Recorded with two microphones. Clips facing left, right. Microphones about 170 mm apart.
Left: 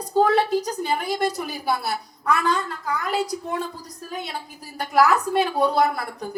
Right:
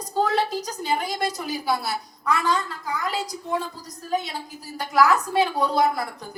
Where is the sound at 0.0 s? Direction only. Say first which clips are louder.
Left 4 dB; 55° left (ahead or behind).